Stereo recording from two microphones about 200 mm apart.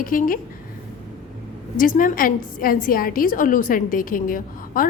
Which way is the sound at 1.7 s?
40° left (ahead or behind).